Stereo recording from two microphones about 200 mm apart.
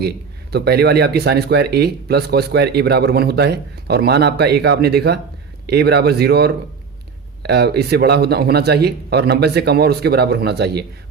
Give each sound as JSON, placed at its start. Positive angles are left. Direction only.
{"t": 0.5, "sound": "speech", "side_deg": -55}